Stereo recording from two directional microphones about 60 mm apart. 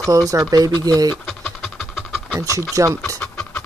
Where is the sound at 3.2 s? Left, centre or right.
Left.